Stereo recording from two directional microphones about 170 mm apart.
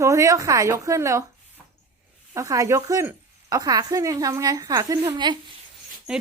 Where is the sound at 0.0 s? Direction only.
15° right (ahead or behind).